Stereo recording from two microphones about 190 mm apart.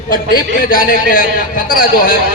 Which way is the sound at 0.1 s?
50° left (ahead or behind).